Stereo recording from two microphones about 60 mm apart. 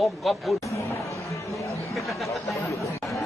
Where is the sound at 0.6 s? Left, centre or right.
Left.